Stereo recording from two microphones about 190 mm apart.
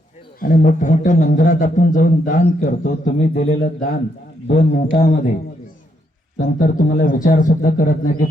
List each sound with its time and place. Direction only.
0.3 s a man's voice: 45° left (ahead or behind)
6.6 s a man's voice: 45° left (ahead or behind)